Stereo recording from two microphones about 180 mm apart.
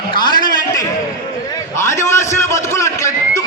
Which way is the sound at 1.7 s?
15° left (ahead or behind).